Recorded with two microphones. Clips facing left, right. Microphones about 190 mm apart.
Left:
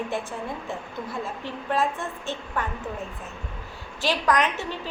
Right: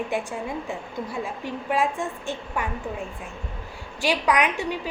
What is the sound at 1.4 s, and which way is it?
A woman's voice, 15° right (ahead or behind).